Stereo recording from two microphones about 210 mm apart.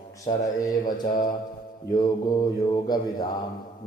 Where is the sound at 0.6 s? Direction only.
15° left (ahead or behind).